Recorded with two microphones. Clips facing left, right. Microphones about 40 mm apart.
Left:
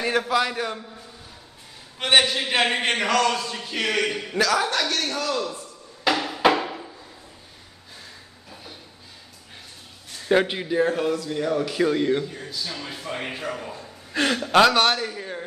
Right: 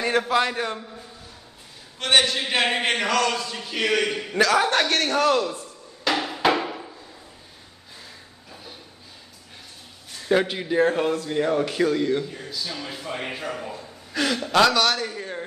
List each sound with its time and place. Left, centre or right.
0.0 s a man's voice: centre
2.0 s a man's voice: centre
2.4 s speech: centre
4.4 s a man's voice: centre
4.6 s a man's voice: right
6.1 s hammer: centre
10.2 s a man's voice: centre
10.7 s a man's voice: centre
11.9 s speech: centre
12.8 s a man's voice: centre
14.1 s a man's voice: left
15.0 s speech: centre